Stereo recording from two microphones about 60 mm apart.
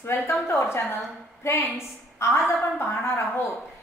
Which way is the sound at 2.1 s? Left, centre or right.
Left.